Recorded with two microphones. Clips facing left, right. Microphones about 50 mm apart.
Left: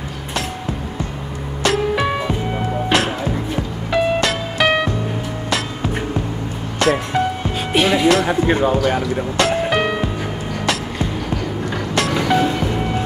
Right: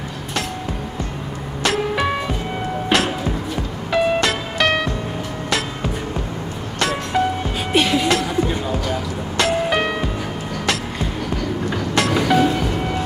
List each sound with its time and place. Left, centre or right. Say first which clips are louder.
1.6 s music: left 2 dB; centre
3.9 s music: even; centre
6.8 s music: left 3 dB; centre
8.5 s speech: left 7 dB; left
9.4 s music: even; centre
11.7 s music: even; centre